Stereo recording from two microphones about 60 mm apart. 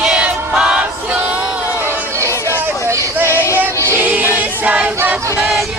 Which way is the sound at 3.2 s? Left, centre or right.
Left.